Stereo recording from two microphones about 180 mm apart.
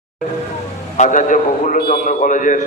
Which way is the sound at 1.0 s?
45° left (ahead or behind).